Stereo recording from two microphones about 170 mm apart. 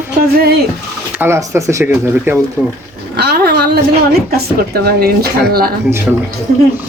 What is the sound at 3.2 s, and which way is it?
Speech, 70° right (ahead or behind).